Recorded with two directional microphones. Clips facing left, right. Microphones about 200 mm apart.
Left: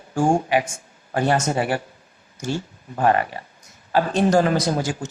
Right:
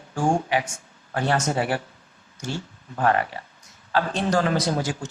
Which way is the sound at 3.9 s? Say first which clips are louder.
Left 5 dB; 15° left (ahead or behind).